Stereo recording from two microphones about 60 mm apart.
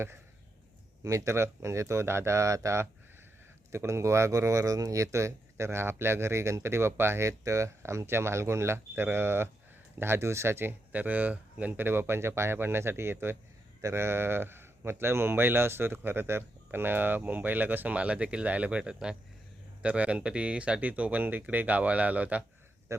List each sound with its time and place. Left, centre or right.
1.0 s speech: right
22.9 s speech: right